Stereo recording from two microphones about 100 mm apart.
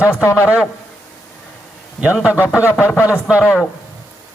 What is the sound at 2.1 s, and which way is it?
Speech, 10° right (ahead or behind).